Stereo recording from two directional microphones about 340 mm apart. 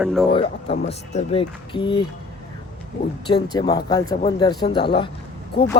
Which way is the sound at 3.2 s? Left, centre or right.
Centre.